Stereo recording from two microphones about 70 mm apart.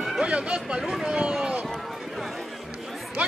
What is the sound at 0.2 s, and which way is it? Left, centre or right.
Speech, centre.